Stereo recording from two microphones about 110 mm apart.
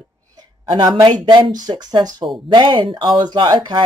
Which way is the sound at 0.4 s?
40° right (ahead or behind).